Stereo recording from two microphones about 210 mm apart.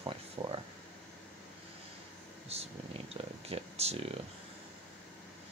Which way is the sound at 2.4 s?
30° right (ahead or behind).